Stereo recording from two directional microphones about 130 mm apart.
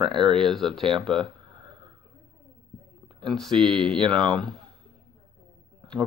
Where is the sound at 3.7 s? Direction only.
5° left (ahead or behind).